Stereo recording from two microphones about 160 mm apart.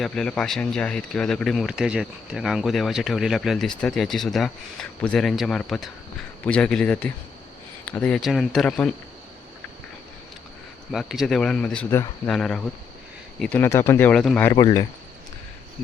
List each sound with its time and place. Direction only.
0.0 s speech: 5° left (ahead or behind)
10.9 s speech: centre (ahead or behind)
14.5 s speech: 25° left (ahead or behind)